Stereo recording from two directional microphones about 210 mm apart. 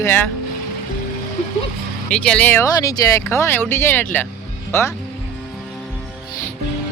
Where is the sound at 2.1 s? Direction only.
5° left (ahead or behind).